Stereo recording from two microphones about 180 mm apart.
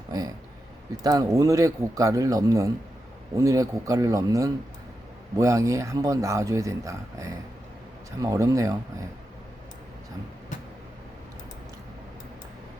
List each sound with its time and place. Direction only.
1.0 s speech: 20° right (ahead or behind)